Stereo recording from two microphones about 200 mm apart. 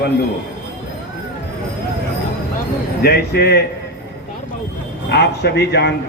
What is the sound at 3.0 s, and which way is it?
Speech, 55° left (ahead or behind).